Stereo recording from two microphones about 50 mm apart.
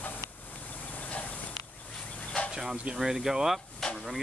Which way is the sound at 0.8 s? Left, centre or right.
Left.